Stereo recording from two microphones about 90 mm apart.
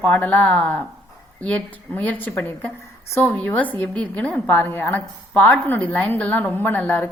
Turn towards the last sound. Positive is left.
turn(degrees=20)  # may be behind; listen again after turning